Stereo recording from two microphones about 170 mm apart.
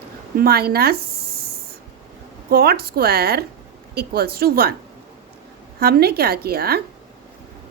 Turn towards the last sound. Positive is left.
turn(degrees=-65)  # may be behind; listen again after turning